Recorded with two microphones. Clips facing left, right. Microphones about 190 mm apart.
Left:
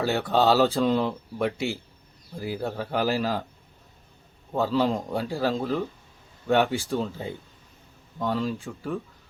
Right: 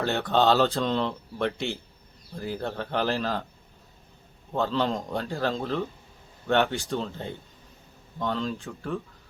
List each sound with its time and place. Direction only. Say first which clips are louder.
0.0 s speech: left 1 dB; 5° left (ahead or behind)
4.5 s speech: left 2 dB; 5° left (ahead or behind)